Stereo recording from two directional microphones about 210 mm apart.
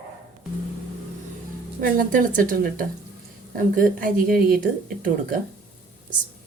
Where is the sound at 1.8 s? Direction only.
40° right (ahead or behind).